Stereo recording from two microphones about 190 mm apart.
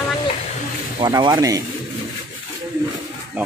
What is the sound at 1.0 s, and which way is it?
Speech, 20° right (ahead or behind).